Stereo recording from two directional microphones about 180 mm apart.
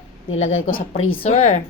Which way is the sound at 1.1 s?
35° left (ahead or behind).